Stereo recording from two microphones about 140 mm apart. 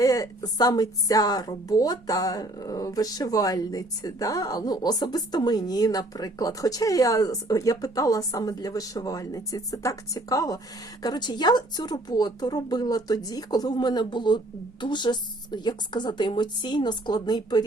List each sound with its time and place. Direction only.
0.0 s a woman's voice: 25° left (ahead or behind)